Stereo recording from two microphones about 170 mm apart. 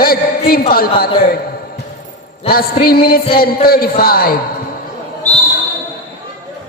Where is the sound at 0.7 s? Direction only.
60° left (ahead or behind).